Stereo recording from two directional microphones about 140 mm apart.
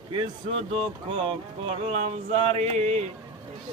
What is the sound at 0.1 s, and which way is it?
Speech, 40° right (ahead or behind).